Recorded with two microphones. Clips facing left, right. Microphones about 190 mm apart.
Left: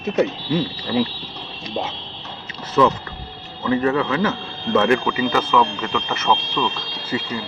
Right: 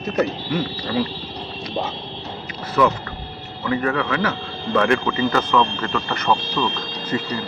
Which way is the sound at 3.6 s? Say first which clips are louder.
Left 3 dB; 25° left (ahead or behind).